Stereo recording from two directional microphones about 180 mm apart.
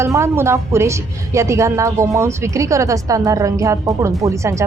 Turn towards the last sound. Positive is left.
turn(degrees=-15)  # may be behind; listen again after turning